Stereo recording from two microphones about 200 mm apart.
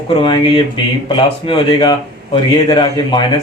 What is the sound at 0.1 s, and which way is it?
A man's voice, 25° left (ahead or behind).